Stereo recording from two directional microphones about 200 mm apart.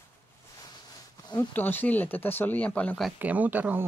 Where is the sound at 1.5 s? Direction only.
10° left (ahead or behind).